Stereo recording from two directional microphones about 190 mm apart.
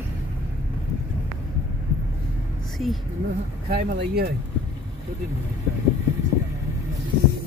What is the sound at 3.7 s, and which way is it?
Speech, 55° right (ahead or behind).